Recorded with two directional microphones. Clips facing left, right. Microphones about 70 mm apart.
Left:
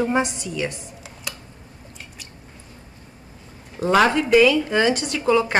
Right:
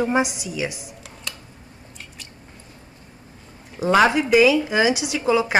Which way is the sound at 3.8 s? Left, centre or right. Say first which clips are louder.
Right 1 dB; centre.